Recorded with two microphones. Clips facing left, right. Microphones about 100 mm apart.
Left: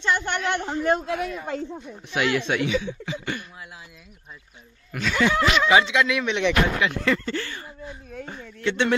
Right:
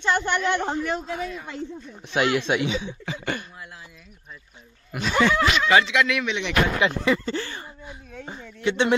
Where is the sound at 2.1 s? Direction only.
25° right (ahead or behind).